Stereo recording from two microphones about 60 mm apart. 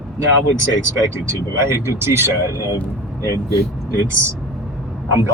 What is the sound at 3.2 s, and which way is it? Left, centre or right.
Speech, right.